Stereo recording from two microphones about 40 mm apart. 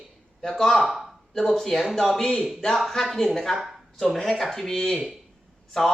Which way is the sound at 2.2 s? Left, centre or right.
Centre.